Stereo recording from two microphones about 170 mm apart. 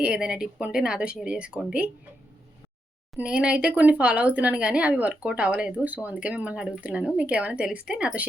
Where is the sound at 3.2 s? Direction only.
5° right (ahead or behind).